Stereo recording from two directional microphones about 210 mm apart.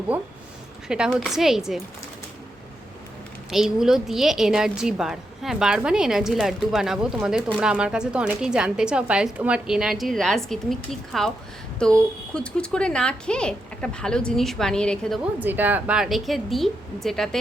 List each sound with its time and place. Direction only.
0.9 s a woman's voice: 5° right (ahead or behind)
3.5 s a woman's voice: centre (ahead or behind)